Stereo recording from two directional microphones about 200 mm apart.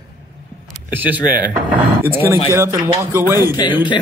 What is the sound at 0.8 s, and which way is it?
Speech, 10° right (ahead or behind).